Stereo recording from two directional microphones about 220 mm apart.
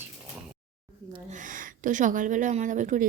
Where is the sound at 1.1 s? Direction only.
35° right (ahead or behind).